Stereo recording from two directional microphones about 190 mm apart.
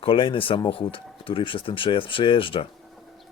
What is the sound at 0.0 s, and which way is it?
Speech, 25° left (ahead or behind).